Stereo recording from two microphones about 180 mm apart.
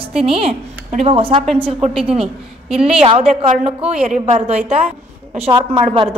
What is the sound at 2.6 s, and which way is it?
Speech, 5° right (ahead or behind).